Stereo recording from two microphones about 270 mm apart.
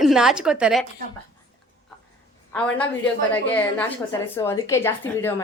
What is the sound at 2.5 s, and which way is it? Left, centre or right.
A woman's voice, centre.